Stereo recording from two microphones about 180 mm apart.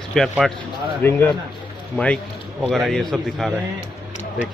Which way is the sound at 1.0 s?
15° left (ahead or behind).